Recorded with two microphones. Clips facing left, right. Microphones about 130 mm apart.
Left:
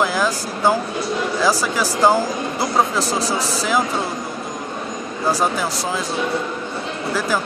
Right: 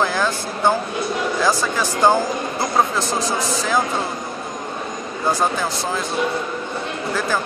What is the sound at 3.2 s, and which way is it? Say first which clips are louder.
Speech: even; 35° left (ahead or behind).